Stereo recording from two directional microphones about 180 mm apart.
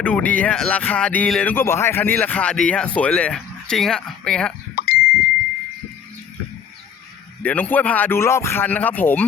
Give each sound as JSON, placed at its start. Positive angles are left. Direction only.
{"t": 0.0, "sound": "speech", "side_deg": 5}
{"t": 4.7, "sound": "a sound", "side_deg": 55}
{"t": 7.4, "sound": "speech", "side_deg": 10}